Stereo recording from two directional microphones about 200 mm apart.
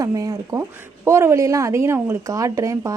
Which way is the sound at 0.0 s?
15° right (ahead or behind).